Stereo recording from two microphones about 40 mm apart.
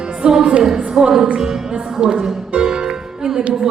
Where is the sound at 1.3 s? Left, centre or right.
Centre.